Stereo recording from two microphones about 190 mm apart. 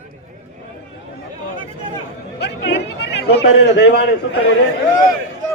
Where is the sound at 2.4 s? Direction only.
60° left (ahead or behind).